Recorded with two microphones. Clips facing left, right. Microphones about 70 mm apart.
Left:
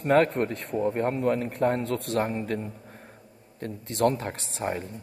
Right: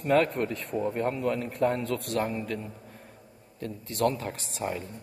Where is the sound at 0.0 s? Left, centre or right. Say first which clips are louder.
Left 3 dB; left.